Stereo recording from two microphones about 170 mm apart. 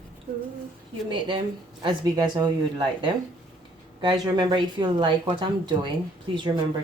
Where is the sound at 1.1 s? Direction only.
30° right (ahead or behind).